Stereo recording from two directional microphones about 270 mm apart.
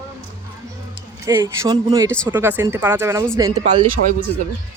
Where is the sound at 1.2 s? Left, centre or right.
Centre.